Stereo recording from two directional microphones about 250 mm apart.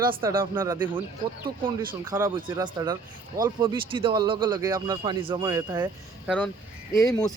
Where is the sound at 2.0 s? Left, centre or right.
Centre.